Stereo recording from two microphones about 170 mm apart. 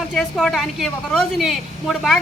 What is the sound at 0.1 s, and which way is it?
A woman's voice, centre (ahead or behind).